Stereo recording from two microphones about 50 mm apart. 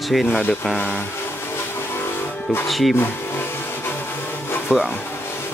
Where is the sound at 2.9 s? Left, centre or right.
Left.